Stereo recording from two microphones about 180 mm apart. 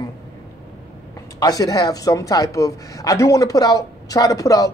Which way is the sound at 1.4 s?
20° left (ahead or behind).